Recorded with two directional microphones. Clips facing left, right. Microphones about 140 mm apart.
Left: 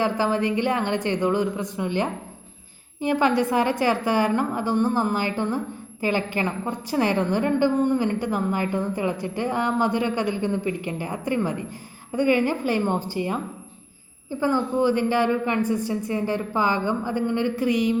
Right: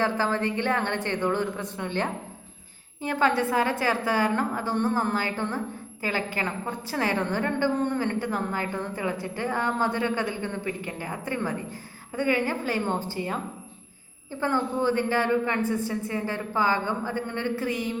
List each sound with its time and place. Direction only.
0.0 s a woman's voice: 15° left (ahead or behind)